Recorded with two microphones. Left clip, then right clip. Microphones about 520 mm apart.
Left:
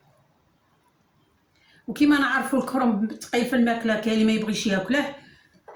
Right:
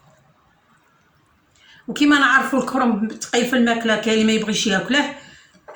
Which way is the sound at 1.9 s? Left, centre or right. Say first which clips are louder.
Right 6 dB; left.